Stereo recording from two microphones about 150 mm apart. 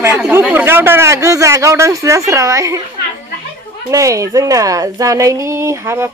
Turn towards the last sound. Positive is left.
turn(degrees=-20)  # may be behind; listen again after turning